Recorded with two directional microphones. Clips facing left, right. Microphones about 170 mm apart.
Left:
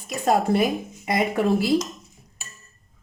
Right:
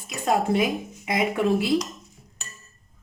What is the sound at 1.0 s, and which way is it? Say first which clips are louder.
Speech: left 1 dB; 40° left (ahead or behind).